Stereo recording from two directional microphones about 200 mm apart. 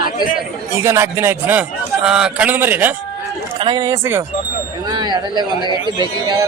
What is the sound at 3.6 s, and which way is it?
Speech, 25° right (ahead or behind).